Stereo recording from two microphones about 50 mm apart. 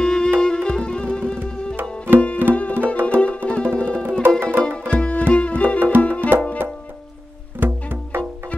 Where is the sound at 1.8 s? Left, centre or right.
Right.